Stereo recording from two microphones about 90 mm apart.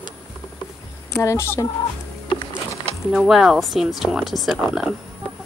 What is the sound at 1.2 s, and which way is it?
Speech, 30° left (ahead or behind).